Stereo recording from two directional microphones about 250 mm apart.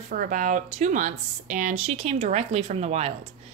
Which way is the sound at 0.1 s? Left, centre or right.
Right.